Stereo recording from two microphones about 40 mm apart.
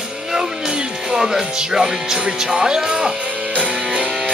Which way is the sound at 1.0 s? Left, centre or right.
Centre.